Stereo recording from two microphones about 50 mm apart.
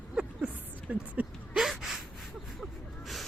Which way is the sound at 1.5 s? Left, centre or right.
Centre.